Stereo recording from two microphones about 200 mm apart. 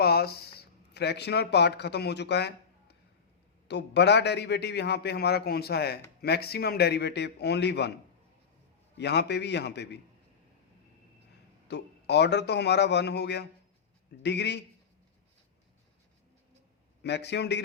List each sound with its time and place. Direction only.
0.0 s a man's voice: 55° left (ahead or behind)
9.0 s a man's voice: 60° left (ahead or behind)
11.7 s a man's voice: 60° left (ahead or behind)
17.0 s a man's voice: 60° left (ahead or behind)